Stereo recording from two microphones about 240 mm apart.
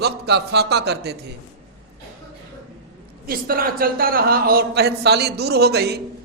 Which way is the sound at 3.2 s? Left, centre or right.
Right.